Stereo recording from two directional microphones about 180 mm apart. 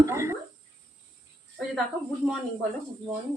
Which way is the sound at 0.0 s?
15° right (ahead or behind).